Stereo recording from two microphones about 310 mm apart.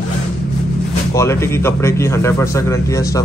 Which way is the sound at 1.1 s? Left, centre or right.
Centre.